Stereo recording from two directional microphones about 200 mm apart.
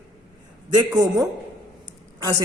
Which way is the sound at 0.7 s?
20° right (ahead or behind).